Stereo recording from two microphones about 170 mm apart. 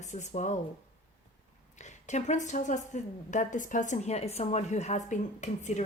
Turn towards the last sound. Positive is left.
turn(degrees=45)  # may be behind; listen again after turning